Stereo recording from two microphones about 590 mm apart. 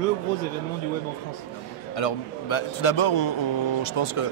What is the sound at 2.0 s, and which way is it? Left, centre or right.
A man's voice, left.